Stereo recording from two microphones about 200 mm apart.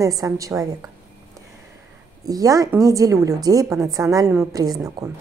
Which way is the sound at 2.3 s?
15° right (ahead or behind).